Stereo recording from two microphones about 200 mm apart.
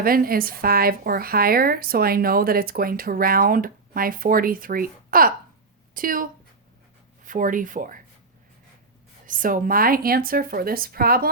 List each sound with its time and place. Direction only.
0.0 s a woman's voice: 45° right (ahead or behind)
7.3 s speech: 40° right (ahead or behind)
9.2 s a woman's voice: 45° right (ahead or behind)